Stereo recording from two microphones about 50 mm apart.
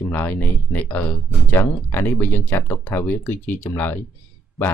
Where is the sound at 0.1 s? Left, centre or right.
Left.